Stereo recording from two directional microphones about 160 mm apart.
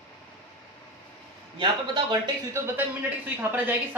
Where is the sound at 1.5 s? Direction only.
30° right (ahead or behind).